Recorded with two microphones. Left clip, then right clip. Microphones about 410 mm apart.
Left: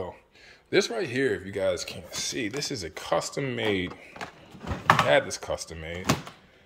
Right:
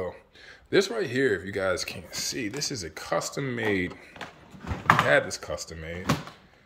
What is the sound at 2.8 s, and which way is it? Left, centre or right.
Speech, centre.